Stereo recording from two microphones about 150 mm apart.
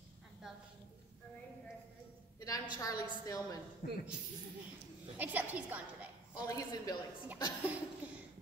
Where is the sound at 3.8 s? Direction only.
65° left (ahead or behind).